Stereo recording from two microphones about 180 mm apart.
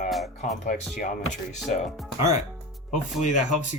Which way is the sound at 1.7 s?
40° left (ahead or behind).